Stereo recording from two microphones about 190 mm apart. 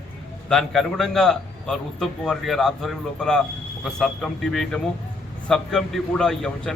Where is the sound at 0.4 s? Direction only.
Centre (ahead or behind).